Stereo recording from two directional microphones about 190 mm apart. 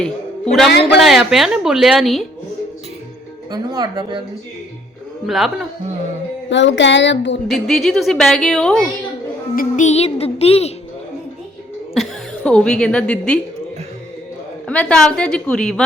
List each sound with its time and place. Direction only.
1.0 s a woman's voice: centre (ahead or behind)
3.5 s speech: 20° right (ahead or behind)
5.2 s a woman's voice: centre (ahead or behind)
6.5 s speech: 70° left (ahead or behind)
7.5 s a woman's voice: centre (ahead or behind)
9.6 s music: 40° left (ahead or behind)
11.9 s a woman's voice: 5° left (ahead or behind)
14.7 s a woman's voice: 5° left (ahead or behind)